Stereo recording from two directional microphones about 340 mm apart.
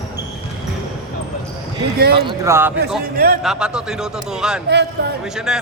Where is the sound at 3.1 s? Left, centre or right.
Right.